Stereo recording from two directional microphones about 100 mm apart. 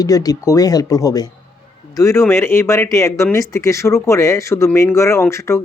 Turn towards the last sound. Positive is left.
turn(degrees=25)  # may be behind; listen again after turning